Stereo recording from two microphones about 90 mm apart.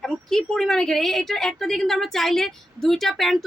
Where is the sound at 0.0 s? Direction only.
5° left (ahead or behind).